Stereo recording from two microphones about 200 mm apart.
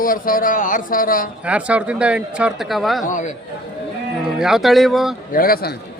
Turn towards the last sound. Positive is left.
turn(degrees=50)  # may be behind; listen again after turning